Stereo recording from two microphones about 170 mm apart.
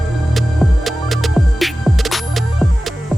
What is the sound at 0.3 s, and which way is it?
Music, centre (ahead or behind).